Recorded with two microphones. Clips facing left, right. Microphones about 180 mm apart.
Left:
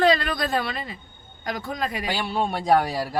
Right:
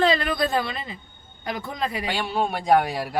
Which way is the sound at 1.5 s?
30° right (ahead or behind).